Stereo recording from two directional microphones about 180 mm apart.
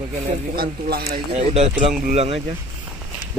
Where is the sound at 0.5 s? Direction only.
60° right (ahead or behind).